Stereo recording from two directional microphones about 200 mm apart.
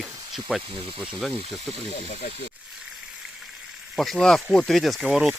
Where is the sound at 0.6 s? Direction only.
25° right (ahead or behind).